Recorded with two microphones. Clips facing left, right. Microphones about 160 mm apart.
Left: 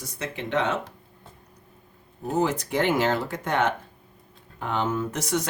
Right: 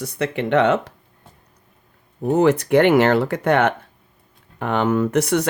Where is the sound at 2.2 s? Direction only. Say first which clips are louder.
Right 9 dB; 65° right (ahead or behind).